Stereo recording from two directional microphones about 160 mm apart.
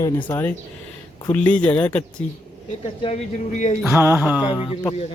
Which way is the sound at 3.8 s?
15° right (ahead or behind).